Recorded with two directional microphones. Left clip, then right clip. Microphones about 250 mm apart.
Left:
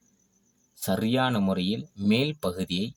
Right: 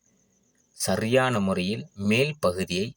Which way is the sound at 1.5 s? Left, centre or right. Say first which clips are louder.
Right 1 dB; right.